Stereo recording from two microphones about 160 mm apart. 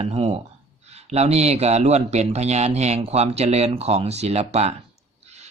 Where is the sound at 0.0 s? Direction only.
40° right (ahead or behind).